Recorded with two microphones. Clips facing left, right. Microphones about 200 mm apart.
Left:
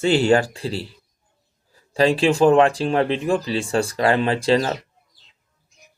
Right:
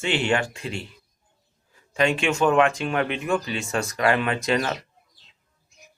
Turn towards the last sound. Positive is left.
turn(degrees=30)  # may be behind; listen again after turning